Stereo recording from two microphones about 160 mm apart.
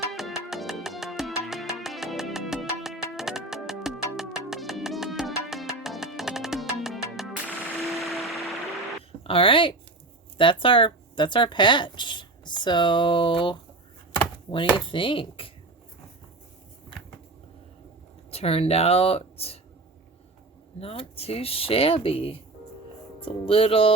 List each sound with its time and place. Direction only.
0.1 s music: centre (ahead or behind)
9.2 s speech: 35° left (ahead or behind)
14.8 s speech: 30° left (ahead or behind)
18.3 s speech: 40° left (ahead or behind)
20.7 s speech: 35° left (ahead or behind)